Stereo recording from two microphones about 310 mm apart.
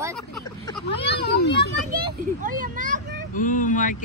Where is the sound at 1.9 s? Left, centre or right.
Right.